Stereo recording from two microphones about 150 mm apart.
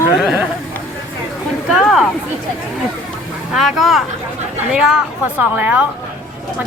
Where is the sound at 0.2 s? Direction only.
5° right (ahead or behind).